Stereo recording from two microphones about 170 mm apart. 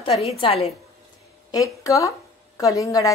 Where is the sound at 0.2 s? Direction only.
35° left (ahead or behind).